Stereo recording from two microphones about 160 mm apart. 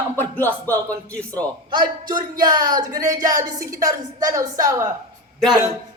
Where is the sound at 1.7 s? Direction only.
30° right (ahead or behind).